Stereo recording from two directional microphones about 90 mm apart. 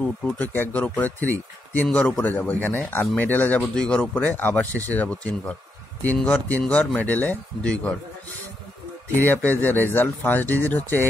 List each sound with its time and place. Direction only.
0.0 s speech: 20° left (ahead or behind)
3.7 s speech: 5° left (ahead or behind)
9.1 s speech: 20° left (ahead or behind)